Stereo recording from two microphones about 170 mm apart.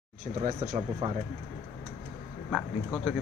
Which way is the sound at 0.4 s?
45° right (ahead or behind).